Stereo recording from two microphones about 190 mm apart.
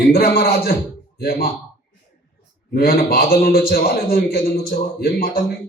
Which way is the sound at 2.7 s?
50° left (ahead or behind).